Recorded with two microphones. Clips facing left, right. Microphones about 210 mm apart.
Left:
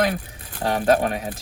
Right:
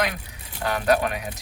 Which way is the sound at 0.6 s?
35° left (ahead or behind).